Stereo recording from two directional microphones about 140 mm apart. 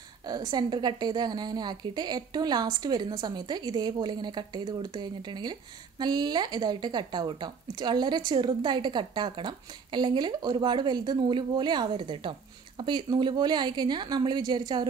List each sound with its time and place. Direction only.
0.3 s a woman's voice: 30° right (ahead or behind)